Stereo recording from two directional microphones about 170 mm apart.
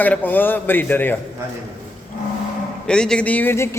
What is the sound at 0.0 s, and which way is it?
Speech, 10° left (ahead or behind).